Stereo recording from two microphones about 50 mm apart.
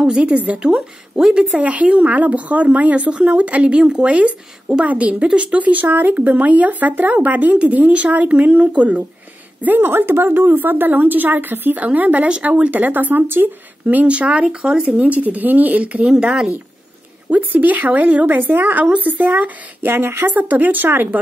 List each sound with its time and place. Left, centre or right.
0.2 s a woman's voice: right
1.1 s speech: centre
1.6 s a woman's voice: right
9.6 s speech: right
16.2 s a woman's voice: centre
17.3 s speech: right
20.3 s speech: right